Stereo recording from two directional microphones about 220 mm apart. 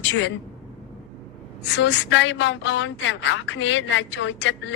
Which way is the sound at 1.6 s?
55° left (ahead or behind).